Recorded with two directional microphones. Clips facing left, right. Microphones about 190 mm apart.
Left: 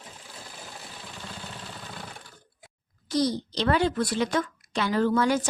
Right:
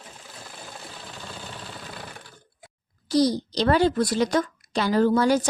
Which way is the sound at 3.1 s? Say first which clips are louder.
Right 5 dB; 35° right (ahead or behind).